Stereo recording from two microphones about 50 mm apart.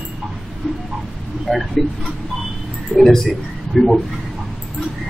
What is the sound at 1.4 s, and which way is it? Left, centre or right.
Speech, centre.